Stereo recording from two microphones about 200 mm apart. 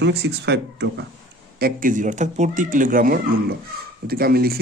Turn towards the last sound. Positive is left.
turn(degrees=-50)  # may be behind; listen again after turning